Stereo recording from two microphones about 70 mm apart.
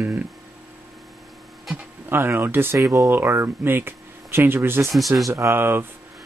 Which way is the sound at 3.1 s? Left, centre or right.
Right.